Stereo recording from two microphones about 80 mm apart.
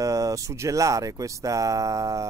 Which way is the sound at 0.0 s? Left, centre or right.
Right.